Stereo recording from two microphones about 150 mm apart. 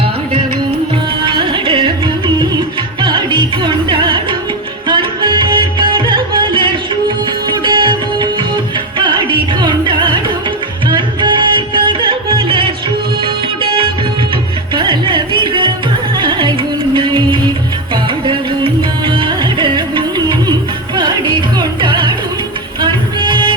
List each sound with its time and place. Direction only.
1.2 s music: 35° right (ahead or behind)